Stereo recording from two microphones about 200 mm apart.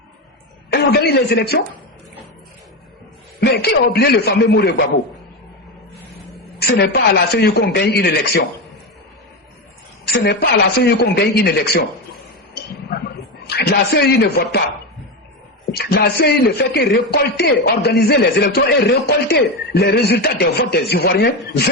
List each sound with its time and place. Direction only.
0.7 s speech: 55° left (ahead or behind)
3.4 s a man's voice: 55° left (ahead or behind)
6.6 s a man's voice: 55° left (ahead or behind)
10.1 s a man's voice: 50° left (ahead or behind)
13.6 s a man's voice: 55° left (ahead or behind)
15.8 s a man's voice: 55° left (ahead or behind)